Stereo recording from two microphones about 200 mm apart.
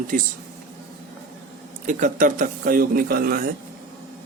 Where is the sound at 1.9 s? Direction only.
40° right (ahead or behind).